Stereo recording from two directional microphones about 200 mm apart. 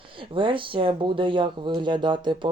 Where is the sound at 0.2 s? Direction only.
25° right (ahead or behind).